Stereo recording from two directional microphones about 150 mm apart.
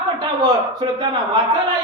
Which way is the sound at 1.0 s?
30° right (ahead or behind).